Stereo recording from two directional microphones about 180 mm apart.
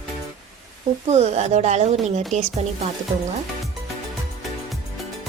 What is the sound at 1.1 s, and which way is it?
Speech, 35° right (ahead or behind).